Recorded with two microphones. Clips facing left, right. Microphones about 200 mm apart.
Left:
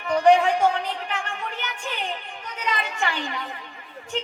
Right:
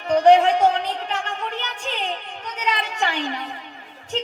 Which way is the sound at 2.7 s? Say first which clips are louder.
Right 2 dB; 20° right (ahead or behind).